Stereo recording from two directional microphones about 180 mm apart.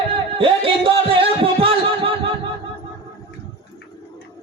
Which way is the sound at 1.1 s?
30° right (ahead or behind).